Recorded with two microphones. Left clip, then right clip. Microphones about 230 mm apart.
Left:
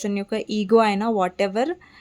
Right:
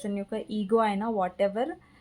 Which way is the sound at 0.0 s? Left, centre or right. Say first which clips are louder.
Left 7 dB; left.